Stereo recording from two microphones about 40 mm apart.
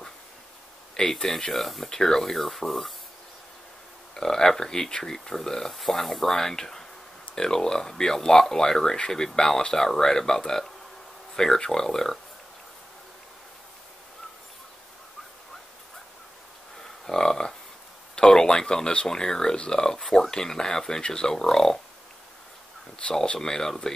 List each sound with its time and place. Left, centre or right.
0.9 s speech: centre
1.9 s speech: centre
4.1 s speech: centre
17.0 s a sound: centre
19.0 s speech: centre
23.2 s speech: left